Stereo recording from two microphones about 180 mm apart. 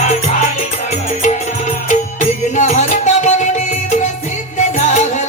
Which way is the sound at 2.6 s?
40° left (ahead or behind).